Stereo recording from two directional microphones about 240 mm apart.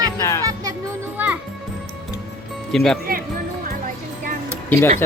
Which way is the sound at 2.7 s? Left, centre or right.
Centre.